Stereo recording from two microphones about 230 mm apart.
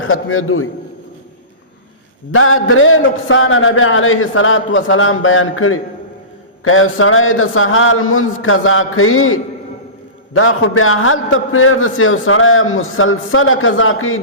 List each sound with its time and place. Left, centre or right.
0.0 s a man's voice: left
2.3 s a man's voice: left